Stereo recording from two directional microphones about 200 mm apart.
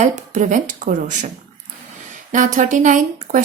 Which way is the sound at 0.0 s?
35° right (ahead or behind).